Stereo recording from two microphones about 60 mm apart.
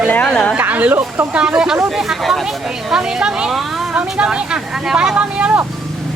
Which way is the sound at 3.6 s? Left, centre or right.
Centre.